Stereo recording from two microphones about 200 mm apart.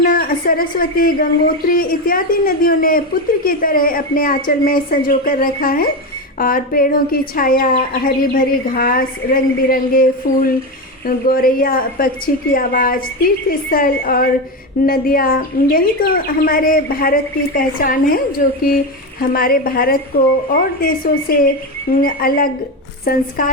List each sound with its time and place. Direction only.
0.0 s a woman's voice: 45° left (ahead or behind)